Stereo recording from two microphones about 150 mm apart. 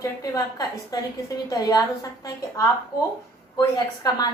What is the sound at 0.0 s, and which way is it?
A woman's voice, 20° left (ahead or behind).